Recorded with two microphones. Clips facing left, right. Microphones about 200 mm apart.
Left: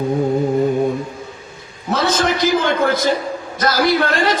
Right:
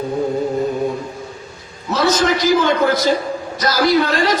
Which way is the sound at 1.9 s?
50° left (ahead or behind).